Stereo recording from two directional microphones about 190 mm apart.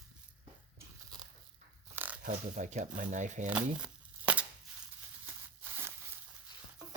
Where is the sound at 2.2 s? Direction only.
45° right (ahead or behind).